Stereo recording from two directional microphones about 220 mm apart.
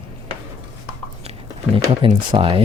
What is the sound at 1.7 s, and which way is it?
Speech, 25° right (ahead or behind).